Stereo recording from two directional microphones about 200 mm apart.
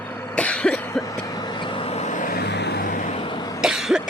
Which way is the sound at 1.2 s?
20° left (ahead or behind).